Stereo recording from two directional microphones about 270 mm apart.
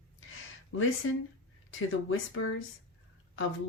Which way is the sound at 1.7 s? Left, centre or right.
Left.